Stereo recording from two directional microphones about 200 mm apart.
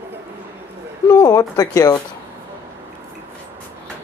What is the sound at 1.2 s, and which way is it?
Speech, 20° left (ahead or behind).